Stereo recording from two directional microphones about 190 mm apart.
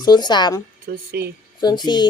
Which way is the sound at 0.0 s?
20° left (ahead or behind).